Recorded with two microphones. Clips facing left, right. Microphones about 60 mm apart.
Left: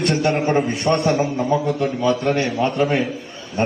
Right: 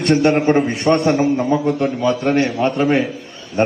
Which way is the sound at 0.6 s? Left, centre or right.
Right.